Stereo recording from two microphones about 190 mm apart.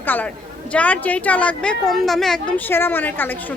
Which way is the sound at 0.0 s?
10° left (ahead or behind).